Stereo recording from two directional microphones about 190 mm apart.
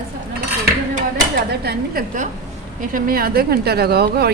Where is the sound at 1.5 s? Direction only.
55° right (ahead or behind).